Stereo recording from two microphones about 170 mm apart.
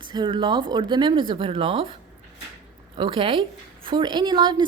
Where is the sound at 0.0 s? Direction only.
25° right (ahead or behind).